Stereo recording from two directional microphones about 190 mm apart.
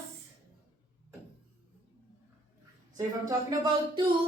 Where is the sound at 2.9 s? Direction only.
20° right (ahead or behind).